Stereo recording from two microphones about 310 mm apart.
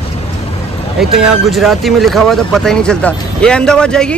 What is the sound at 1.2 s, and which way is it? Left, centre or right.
Speech, centre.